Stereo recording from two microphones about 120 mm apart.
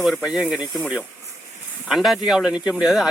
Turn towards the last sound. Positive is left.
turn(degrees=-5)  # may be behind; listen again after turning